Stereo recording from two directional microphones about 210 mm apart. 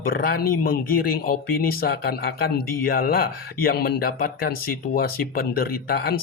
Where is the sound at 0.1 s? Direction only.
45° left (ahead or behind).